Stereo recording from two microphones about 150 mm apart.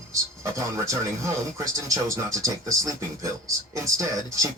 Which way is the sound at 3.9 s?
20° right (ahead or behind).